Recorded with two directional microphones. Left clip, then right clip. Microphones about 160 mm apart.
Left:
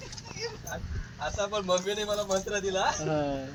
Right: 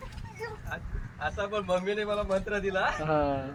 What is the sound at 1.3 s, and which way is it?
A man's voice, 10° left (ahead or behind).